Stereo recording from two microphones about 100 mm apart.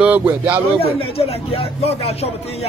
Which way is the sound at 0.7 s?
70° left (ahead or behind).